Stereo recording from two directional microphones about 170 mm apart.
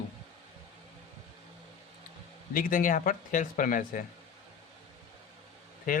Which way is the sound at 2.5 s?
55° left (ahead or behind).